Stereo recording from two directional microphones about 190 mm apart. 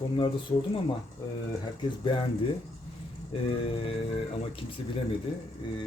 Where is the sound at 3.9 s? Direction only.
30° left (ahead or behind).